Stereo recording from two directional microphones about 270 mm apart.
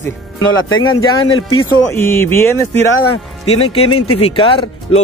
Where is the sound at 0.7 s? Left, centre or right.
Left.